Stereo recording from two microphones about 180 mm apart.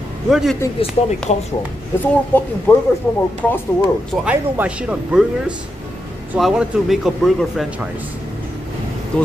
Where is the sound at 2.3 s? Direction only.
10° left (ahead or behind).